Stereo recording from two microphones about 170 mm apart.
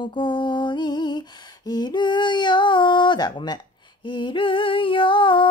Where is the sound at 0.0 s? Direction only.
25° left (ahead or behind).